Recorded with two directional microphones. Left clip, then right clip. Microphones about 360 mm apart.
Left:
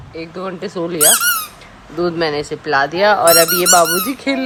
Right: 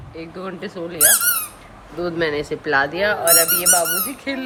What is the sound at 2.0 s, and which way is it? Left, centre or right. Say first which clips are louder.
Speech: left 4 dB; centre.